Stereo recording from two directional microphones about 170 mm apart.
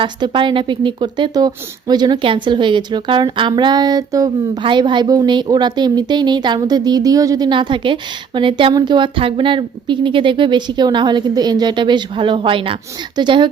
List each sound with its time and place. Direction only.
0.0 s a woman's voice: 30° right (ahead or behind)